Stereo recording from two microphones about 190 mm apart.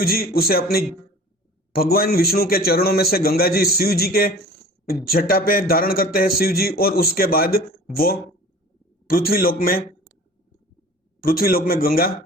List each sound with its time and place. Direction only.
0.0 s a man's voice: 50° left (ahead or behind)
11.2 s a man's voice: 50° left (ahead or behind)